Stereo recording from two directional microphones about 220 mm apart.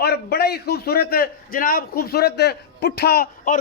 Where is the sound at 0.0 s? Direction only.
45° left (ahead or behind).